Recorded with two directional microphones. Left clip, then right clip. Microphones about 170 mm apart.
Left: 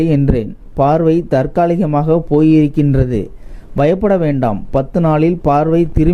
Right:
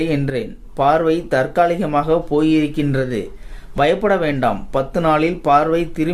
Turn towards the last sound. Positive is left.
turn(degrees=45)  # may be behind; listen again after turning